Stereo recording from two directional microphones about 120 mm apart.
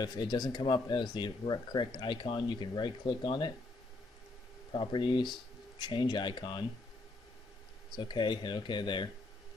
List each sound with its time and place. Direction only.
0.0 s speech: 35° left (ahead or behind)
4.7 s speech: 40° left (ahead or behind)
7.9 s speech: 40° left (ahead or behind)